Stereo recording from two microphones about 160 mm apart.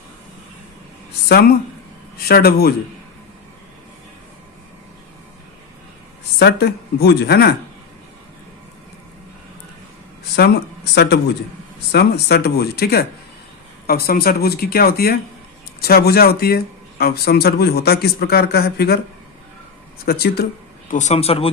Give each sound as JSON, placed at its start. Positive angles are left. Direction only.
{"t": 1.3, "sound": "speech", "side_deg": 70}
{"t": 6.4, "sound": "speech", "side_deg": 90}
{"t": 10.9, "sound": "speech", "side_deg": 90}
{"t": 20.1, "sound": "speech", "side_deg": 80}
{"t": 20.9, "sound": "speech", "side_deg": 45}